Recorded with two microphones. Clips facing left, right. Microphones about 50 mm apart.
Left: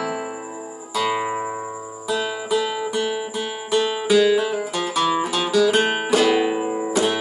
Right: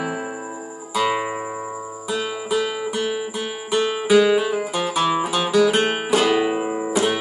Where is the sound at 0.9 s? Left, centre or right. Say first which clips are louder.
Right 1 dB; centre.